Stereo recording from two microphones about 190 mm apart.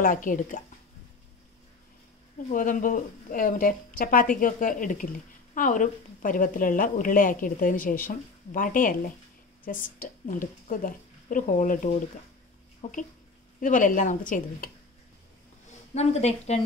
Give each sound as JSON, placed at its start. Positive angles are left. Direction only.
{"t": 0.0, "sound": "a woman's voice", "side_deg": 45}
{"t": 2.5, "sound": "a woman's voice", "side_deg": 45}
{"t": 15.9, "sound": "speech", "side_deg": 35}